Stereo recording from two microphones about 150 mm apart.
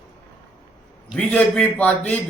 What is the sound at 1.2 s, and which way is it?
A man's voice, 5° left (ahead or behind).